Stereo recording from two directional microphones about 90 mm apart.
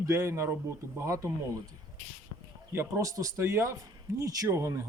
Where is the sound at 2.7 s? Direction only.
25° right (ahead or behind).